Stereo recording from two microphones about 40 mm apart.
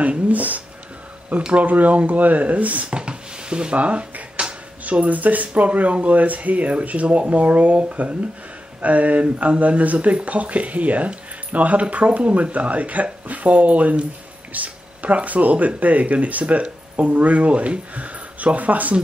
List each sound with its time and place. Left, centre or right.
0.0 s speech: right
2.9 s a sound: right
3.7 s speech: right